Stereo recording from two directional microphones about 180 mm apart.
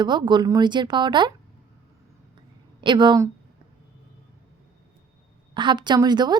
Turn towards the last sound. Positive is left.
turn(degrees=-25)  # may be behind; listen again after turning